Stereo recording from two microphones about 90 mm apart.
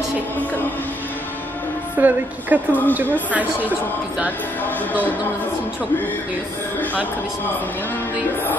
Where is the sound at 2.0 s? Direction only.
20° right (ahead or behind).